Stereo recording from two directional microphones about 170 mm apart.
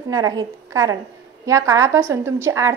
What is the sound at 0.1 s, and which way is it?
A woman's voice, 20° right (ahead or behind).